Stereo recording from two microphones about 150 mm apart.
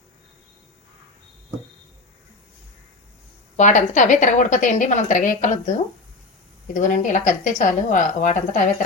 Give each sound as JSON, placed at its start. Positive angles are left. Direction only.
{"t": 3.6, "sound": "a woman's voice", "side_deg": 55}
{"t": 6.7, "sound": "a woman's voice", "side_deg": 55}